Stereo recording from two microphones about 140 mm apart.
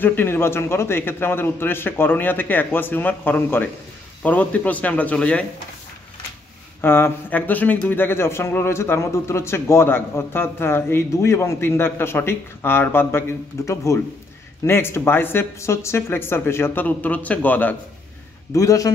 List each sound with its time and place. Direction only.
0.0 s speech: 15° left (ahead or behind)
6.8 s a man's voice: 15° left (ahead or behind)
18.5 s a man's voice: 25° left (ahead or behind)